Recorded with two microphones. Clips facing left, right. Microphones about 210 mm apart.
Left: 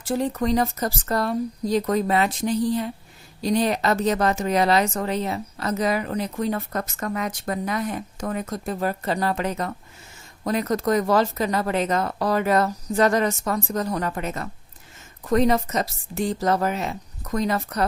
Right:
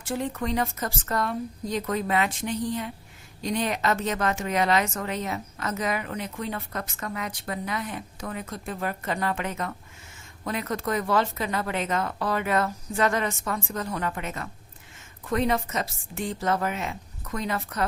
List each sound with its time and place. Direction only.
0.0 s speech: 40° left (ahead or behind)